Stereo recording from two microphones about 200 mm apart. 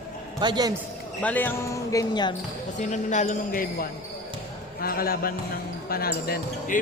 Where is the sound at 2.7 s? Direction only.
35° left (ahead or behind).